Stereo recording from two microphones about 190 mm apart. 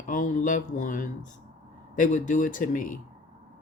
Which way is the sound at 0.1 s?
45° left (ahead or behind).